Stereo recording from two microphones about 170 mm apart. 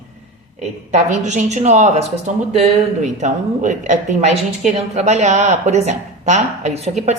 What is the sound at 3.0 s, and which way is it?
A woman's voice, 45° right (ahead or behind).